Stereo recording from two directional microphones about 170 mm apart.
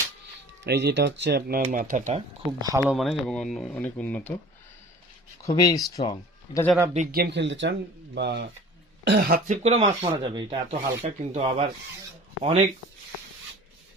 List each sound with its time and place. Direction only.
0.6 s speech: 80° right
1.6 s speech: 50° right (ahead or behind)
2.1 s speech: 25° right (ahead or behind)
2.8 s speech: centre (ahead or behind)
5.4 s speech: 20° left (ahead or behind)
7.1 s speech: 75° right (ahead or behind)
9.0 s speech: 60° right (ahead or behind)
9.6 s speech: 35° right (ahead or behind)
10.7 s speech: 45° right (ahead or behind)